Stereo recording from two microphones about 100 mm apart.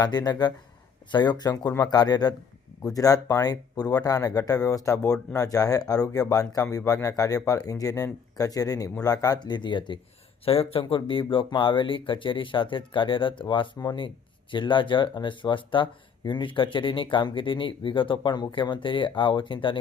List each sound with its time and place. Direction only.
0.0 s speech: 45° left (ahead or behind)
10.4 s speech: 70° left (ahead or behind); by 13.7 s 55° left (ahead or behind)
13.7 s speech: 45° left (ahead or behind)